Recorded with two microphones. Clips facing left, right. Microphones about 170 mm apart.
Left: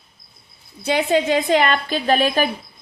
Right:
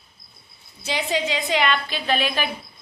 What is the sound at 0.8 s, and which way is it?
A woman's voice, 55° left (ahead or behind).